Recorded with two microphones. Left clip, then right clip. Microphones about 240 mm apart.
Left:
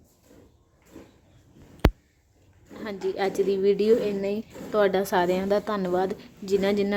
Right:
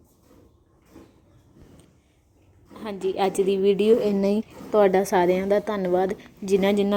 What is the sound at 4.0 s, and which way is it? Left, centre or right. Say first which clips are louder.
Speech: right 4 dB; right.